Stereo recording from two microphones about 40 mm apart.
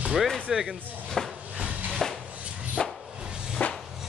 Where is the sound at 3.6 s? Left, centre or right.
Left.